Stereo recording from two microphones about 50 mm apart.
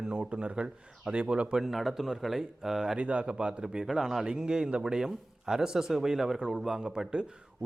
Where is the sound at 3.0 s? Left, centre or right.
Right.